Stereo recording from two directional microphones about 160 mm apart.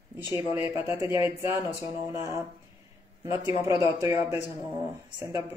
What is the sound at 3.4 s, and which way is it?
Speech, 20° right (ahead or behind).